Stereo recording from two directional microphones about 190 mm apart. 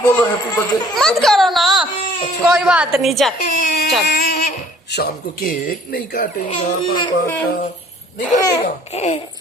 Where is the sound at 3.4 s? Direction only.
50° left (ahead or behind).